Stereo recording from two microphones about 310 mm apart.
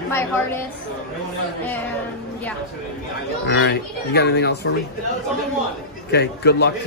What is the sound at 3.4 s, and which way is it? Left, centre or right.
A man's voice, left.